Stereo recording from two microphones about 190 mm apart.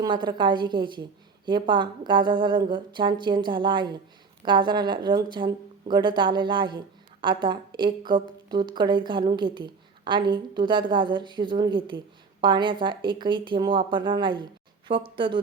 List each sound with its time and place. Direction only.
0.0 s a woman's voice: 25° right (ahead or behind)